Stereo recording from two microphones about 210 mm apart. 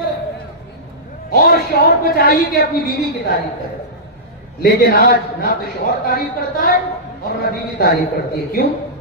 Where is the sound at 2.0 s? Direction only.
45° left (ahead or behind).